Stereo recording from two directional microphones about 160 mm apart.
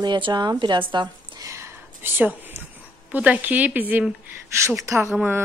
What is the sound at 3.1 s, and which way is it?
A woman's voice, 10° right (ahead or behind).